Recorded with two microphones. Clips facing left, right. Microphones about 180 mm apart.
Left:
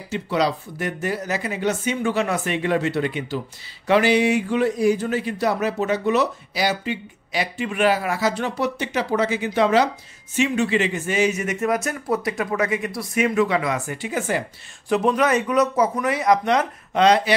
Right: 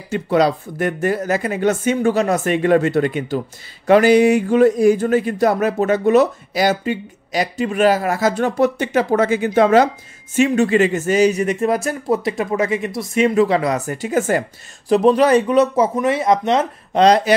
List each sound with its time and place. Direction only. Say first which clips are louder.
0.1 s speech: right 6 dB; 50° right (ahead or behind)
14.9 s speech: right 6 dB; 30° right (ahead or behind)
17.0 s speech: right 4 dB; 40° right (ahead or behind)